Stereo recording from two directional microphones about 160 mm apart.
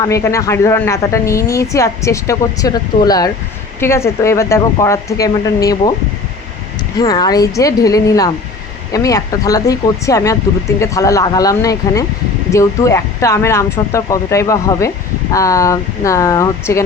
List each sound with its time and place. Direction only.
0.0 s a woman's voice: 20° left (ahead or behind)
7.0 s a woman's voice: 25° left (ahead or behind)